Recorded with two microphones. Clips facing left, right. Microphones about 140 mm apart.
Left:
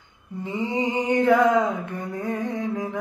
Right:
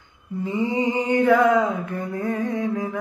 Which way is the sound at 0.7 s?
20° left (ahead or behind).